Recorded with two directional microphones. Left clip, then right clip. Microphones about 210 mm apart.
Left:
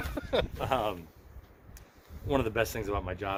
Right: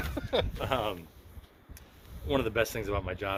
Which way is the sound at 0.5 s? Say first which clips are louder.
Left 1 dB; 15° left (ahead or behind).